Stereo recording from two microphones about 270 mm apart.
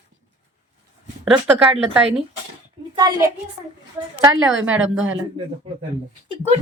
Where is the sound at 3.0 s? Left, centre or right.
Centre.